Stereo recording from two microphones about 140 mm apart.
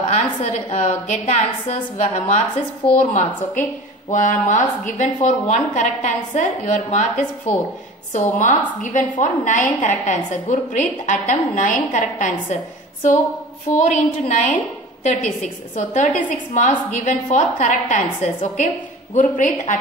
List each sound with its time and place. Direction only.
0.1 s a woman's voice: 55° left (ahead or behind)
13.7 s a woman's voice: 60° left (ahead or behind)